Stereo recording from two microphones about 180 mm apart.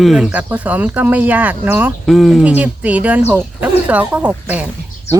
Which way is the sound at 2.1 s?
Centre (ahead or behind).